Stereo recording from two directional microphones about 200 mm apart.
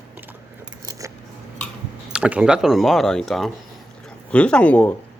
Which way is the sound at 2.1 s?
5° right (ahead or behind).